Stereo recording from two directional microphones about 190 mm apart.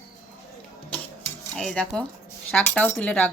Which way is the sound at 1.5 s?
5° left (ahead or behind).